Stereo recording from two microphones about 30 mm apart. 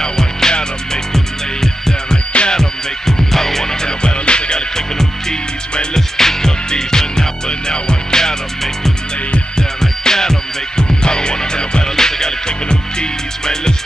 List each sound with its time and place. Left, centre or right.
0.0 s music: centre
0.5 s music: left
1.1 s music: centre
3.6 s music: left
9.6 s music: centre